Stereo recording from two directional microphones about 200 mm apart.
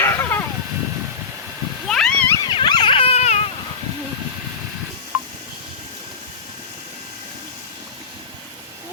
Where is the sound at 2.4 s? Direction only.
20° left (ahead or behind).